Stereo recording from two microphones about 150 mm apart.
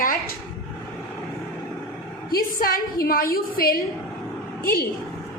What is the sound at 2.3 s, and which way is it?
A woman's voice, 80° left.